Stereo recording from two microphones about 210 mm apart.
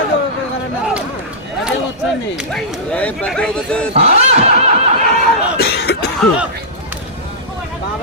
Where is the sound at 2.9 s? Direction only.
5° left (ahead or behind).